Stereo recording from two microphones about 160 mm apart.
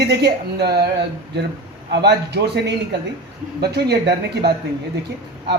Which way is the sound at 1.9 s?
90° right.